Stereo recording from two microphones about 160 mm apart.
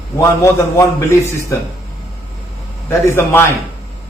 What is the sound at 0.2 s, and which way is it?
A man's voice, 15° left (ahead or behind).